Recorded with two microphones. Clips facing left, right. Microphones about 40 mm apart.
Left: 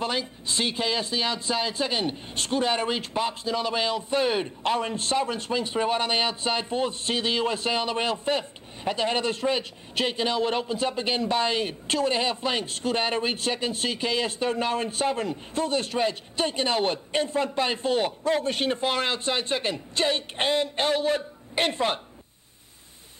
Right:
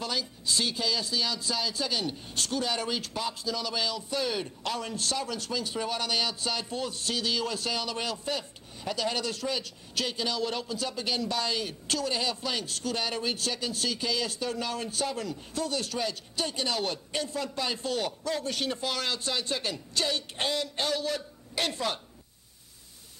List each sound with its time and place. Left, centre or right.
0.0 s speech: left